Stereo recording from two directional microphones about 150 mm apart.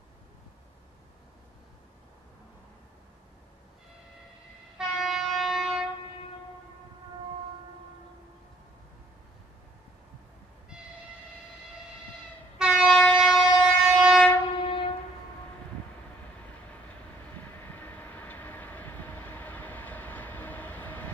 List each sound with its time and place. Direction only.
4.7 s train: centre (ahead or behind)
12.5 s train: 5° right (ahead or behind)
14.6 s train: 35° left (ahead or behind)
17.7 s train: 10° left (ahead or behind)